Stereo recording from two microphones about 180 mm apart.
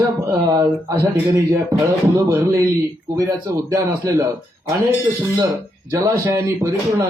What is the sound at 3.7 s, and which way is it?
A man's voice, 20° right (ahead or behind).